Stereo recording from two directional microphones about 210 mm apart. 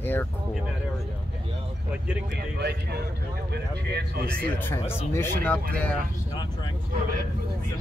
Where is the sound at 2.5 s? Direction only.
50° right (ahead or behind).